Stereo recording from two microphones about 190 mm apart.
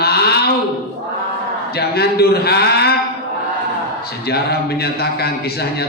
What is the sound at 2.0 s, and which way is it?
Speech, 55° left (ahead or behind).